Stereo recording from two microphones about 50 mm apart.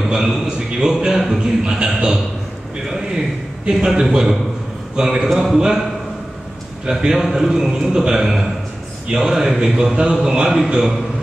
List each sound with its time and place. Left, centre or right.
0.1 s a man's voice: centre
1.4 s a man's voice: centre
3.7 s a man's voice: centre
6.9 s a man's voice: centre